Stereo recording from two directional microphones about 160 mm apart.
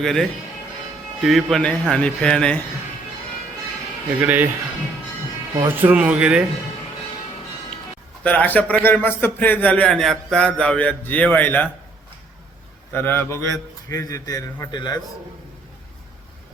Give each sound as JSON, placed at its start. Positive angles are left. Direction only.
{"t": 0.0, "sound": "a man's voice", "side_deg": 0}
{"t": 4.2, "sound": "speech", "side_deg": -10}
{"t": 5.5, "sound": "speech", "side_deg": -10}
{"t": 8.2, "sound": "a man's voice", "side_deg": 10}
{"t": 12.9, "sound": "a man's voice", "side_deg": 15}